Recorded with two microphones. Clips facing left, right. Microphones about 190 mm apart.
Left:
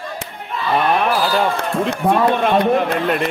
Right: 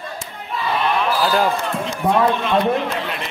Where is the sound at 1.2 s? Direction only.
Centre (ahead or behind).